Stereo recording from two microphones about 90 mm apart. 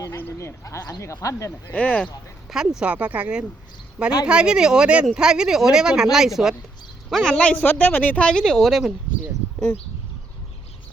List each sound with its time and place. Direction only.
0.2 s speech: 30° left (ahead or behind)
1.7 s speech: 15° left (ahead or behind)
2.5 s speech: 5° right (ahead or behind)
7.1 s speech: 5° left (ahead or behind)